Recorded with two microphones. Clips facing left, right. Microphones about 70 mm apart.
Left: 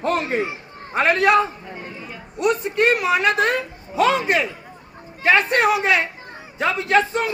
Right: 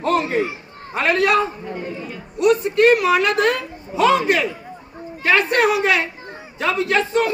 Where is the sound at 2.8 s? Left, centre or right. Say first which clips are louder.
Right 3 dB; centre.